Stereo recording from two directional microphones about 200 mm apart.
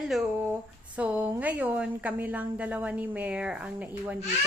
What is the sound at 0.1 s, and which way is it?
A woman's voice, centre (ahead or behind).